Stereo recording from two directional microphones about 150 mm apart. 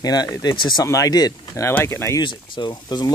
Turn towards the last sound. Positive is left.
turn(degrees=30)  # may be behind; listen again after turning